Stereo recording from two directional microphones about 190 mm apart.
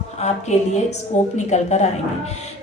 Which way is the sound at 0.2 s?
35° left (ahead or behind).